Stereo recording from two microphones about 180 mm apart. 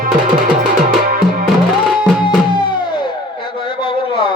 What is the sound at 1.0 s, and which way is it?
Music, 50° right (ahead or behind).